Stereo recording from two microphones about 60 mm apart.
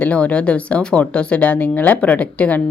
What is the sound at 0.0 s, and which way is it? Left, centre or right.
A woman's voice, left.